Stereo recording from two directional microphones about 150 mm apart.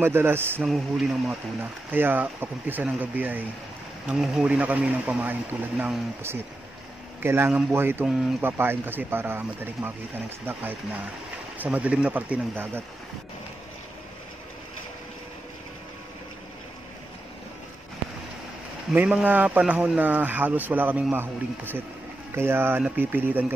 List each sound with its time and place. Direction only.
0.0 s a man's voice: 15° right (ahead or behind)
0.7 s a man's voice: centre (ahead or behind)
18.9 s a man's voice: 10° right (ahead or behind)